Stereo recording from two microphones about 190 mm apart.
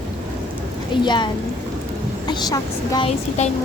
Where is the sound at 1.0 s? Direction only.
25° left (ahead or behind).